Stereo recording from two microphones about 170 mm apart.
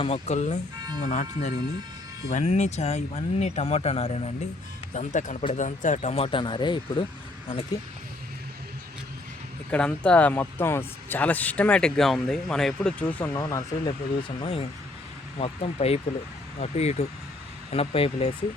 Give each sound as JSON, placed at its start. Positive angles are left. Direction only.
{"t": 0.0, "sound": "speech", "side_deg": 40}
{"t": 9.7, "sound": "speech", "side_deg": 5}
{"t": 14.2, "sound": "speech", "side_deg": 30}